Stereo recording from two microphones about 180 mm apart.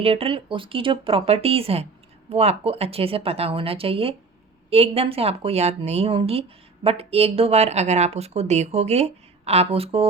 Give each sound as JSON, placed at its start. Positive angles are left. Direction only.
{"t": 0.0, "sound": "speech", "side_deg": -30}